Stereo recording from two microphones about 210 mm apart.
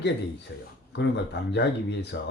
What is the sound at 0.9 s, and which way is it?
Speech, 55° left (ahead or behind).